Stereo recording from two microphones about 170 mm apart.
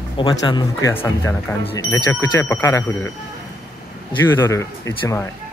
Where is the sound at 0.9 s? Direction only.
15° left (ahead or behind).